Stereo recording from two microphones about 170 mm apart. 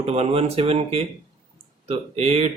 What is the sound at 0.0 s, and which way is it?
Speech, 35° right (ahead or behind).